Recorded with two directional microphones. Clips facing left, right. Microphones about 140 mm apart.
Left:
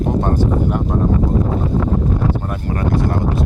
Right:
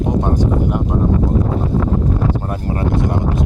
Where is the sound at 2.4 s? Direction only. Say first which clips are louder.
Right 1 dB; 30° right (ahead or behind).